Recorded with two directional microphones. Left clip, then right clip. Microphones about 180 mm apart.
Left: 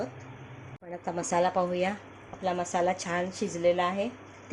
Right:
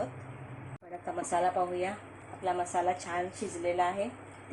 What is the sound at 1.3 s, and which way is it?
Speech, 60° left (ahead or behind).